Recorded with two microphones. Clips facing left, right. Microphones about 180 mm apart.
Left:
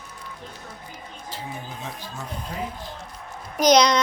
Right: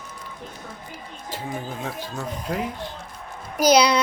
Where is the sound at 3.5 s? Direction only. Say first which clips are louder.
Even; 5° right (ahead or behind).